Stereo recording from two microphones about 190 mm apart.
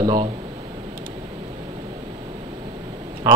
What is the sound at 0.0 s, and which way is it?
Speech, 20° right (ahead or behind).